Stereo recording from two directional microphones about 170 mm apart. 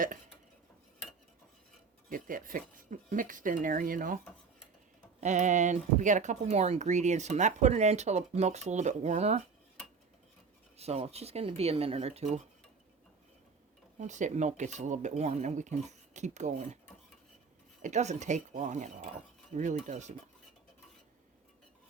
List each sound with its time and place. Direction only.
2.0 s speech: 55° right (ahead or behind)
5.2 s speech: 45° right (ahead or behind)
10.8 s speech: 40° right (ahead or behind)
14.0 s speech: 45° right (ahead or behind)
17.8 s speech: 45° right (ahead or behind)